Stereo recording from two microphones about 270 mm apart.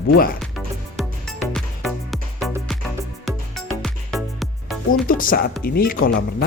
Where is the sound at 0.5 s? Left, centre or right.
Centre.